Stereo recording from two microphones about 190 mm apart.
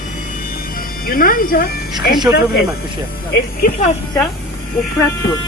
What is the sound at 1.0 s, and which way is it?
Speech, 50° left (ahead or behind).